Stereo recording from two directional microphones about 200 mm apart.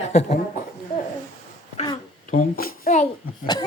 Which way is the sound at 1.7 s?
35° left (ahead or behind).